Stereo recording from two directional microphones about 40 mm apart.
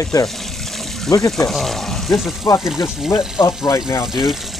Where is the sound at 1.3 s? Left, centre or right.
Centre.